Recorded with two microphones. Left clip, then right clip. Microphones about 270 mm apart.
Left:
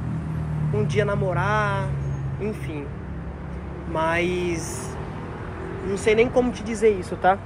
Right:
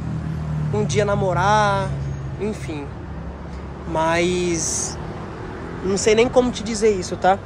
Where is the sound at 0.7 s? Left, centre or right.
Centre.